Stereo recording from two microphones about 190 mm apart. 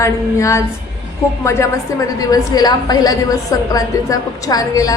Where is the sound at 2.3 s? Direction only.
20° left (ahead or behind).